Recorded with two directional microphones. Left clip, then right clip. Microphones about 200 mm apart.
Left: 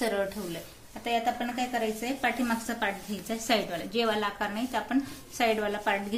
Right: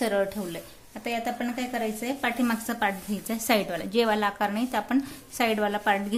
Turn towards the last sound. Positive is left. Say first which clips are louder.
# right 4 dB
turn(degrees=-50)  # may be behind; listen again after turning